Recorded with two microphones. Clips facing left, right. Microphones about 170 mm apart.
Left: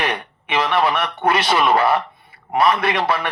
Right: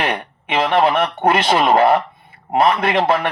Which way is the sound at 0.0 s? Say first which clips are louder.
Right 2 dB; 30° right (ahead or behind).